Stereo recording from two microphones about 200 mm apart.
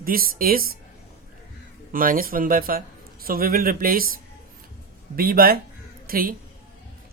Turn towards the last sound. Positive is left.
turn(degrees=-45)  # may be behind; listen again after turning